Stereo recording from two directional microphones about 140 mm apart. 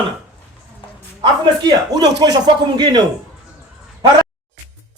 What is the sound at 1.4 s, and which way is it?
Speech, 30° right (ahead or behind).